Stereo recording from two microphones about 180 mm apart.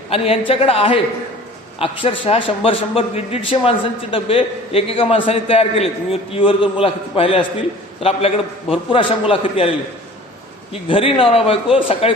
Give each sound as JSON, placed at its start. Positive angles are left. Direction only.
{"t": 0.1, "sound": "a man's voice", "side_deg": 30}
{"t": 8.7, "sound": "a man's voice", "side_deg": 30}
{"t": 10.7, "sound": "a man's voice", "side_deg": 30}